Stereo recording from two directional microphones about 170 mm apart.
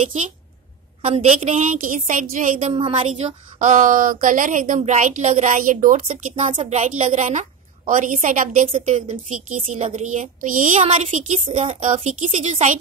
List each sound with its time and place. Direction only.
1.0 s a woman's voice: 35° right (ahead or behind)
2.7 s a woman's voice: 30° right (ahead or behind)
3.1 s a woman's voice: 45° right (ahead or behind)
9.6 s a woman's voice: 35° right (ahead or behind)